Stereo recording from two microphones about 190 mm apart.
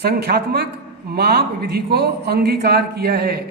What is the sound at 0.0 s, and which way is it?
Speech, 55° right (ahead or behind).